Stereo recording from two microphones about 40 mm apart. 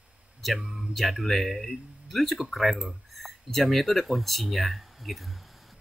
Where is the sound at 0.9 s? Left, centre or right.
Centre.